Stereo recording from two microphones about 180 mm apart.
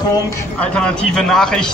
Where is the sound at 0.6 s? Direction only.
5° left (ahead or behind).